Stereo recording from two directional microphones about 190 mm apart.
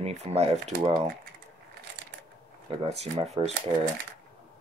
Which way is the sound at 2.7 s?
35° right (ahead or behind).